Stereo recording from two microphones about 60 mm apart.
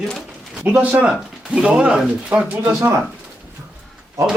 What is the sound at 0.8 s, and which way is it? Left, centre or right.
Speech, right.